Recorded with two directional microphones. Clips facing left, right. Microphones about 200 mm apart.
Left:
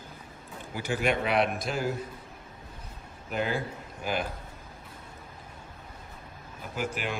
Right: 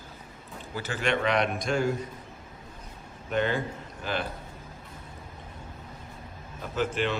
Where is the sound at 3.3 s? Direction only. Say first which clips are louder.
Right 3 dB; 5° left (ahead or behind).